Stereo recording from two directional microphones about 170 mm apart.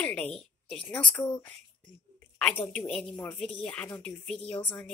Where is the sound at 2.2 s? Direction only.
10° left (ahead or behind).